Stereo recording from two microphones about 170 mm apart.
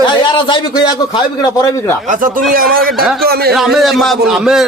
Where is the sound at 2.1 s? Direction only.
55° right (ahead or behind).